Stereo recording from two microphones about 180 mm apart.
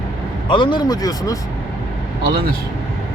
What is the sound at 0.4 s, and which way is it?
Speech, 25° left (ahead or behind).